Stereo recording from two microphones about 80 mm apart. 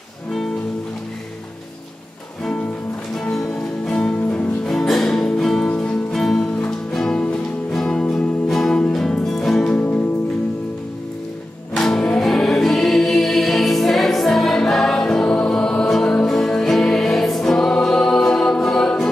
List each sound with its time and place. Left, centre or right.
3.2 s music: centre
9.8 s music: left
11.7 s music: centre